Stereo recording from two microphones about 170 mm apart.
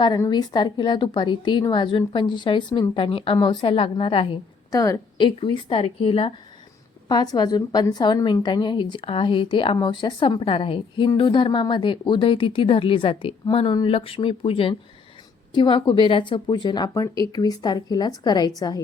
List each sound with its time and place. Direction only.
0.0 s a woman's voice: 25° left (ahead or behind)
4.7 s a woman's voice: 20° left (ahead or behind)